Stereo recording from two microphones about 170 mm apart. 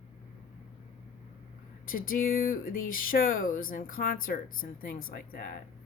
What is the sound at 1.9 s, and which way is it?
Speech, 55° left (ahead or behind).